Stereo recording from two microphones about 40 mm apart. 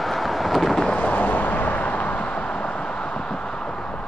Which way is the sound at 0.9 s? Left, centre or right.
Left.